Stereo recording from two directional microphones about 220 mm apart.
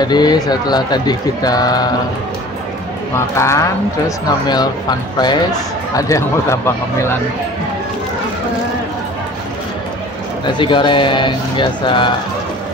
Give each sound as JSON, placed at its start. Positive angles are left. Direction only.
{"t": 0.0, "sound": "speech", "side_deg": 20}
{"t": 3.3, "sound": "speech", "side_deg": 15}
{"t": 10.4, "sound": "speech", "side_deg": 20}